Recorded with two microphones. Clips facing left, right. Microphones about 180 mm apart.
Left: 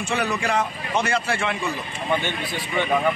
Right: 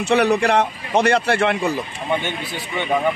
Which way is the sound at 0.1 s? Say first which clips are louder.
Right 8 dB; 70° right (ahead or behind).